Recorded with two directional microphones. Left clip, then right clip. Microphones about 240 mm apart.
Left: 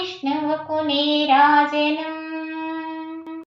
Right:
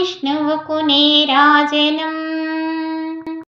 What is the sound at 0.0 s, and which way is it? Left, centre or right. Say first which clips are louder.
Child singing: right 6 dB; right.